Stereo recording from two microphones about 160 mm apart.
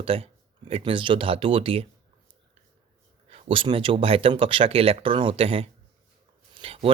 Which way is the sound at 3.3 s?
35° right (ahead or behind).